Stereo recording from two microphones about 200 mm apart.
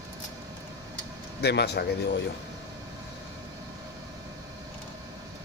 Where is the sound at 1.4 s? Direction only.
55° left (ahead or behind).